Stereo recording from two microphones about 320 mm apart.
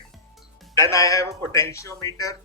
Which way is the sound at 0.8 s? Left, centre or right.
Centre.